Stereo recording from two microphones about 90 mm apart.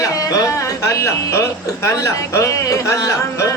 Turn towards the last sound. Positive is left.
turn(degrees=35)  # may be behind; listen again after turning